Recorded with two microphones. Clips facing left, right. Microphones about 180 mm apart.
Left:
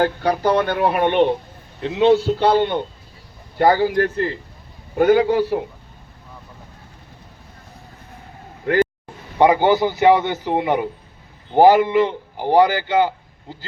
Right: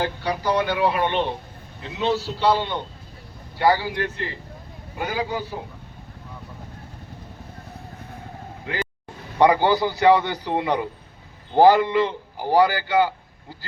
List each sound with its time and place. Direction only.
0.0 s a man's voice: 55° left (ahead or behind)
4.9 s a man's voice: 60° left (ahead or behind)
8.6 s vehicle: 50° left (ahead or behind)
9.4 s a man's voice: 20° left (ahead or behind)